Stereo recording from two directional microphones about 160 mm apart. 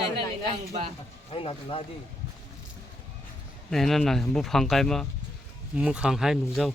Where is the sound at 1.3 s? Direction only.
35° left (ahead or behind).